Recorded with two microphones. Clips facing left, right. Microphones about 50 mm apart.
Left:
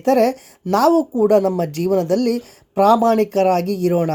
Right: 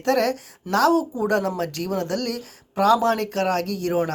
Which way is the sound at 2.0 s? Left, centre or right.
Right.